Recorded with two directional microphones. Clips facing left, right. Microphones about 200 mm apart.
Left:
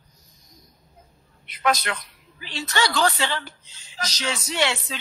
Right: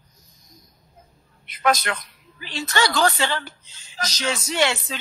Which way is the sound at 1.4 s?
45° right (ahead or behind).